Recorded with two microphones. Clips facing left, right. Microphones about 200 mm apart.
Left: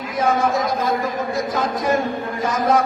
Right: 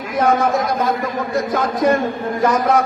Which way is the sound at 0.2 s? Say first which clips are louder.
Right 3 dB; 60° right (ahead or behind).